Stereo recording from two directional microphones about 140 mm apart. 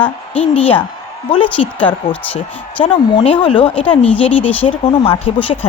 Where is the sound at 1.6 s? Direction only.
50° left (ahead or behind).